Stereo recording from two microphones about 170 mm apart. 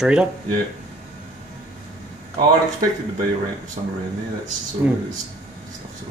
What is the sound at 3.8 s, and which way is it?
Speech, 35° right (ahead or behind).